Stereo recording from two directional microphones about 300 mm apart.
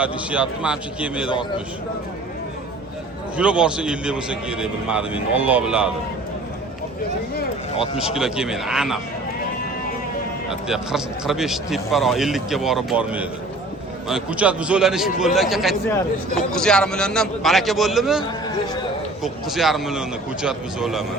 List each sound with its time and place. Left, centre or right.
0.0 s a man's voice: centre
1.3 s a man's voice: centre
3.3 s a man's voice: centre
7.9 s a man's voice: centre
10.5 s a man's voice: centre